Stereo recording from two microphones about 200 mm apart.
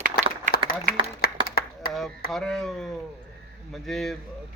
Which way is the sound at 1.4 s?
50° left (ahead or behind).